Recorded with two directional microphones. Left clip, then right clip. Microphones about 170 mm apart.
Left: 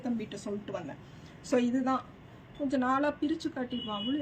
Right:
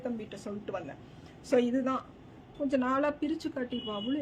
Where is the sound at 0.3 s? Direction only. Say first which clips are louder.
Left 1 dB; 35° right (ahead or behind).